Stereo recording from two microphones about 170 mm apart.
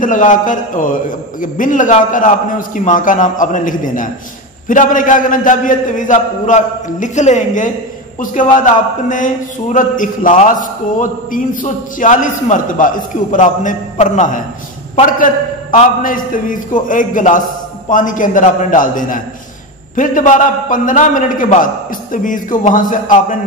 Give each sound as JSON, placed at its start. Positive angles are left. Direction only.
{"t": 0.0, "sound": "a man's voice", "side_deg": 50}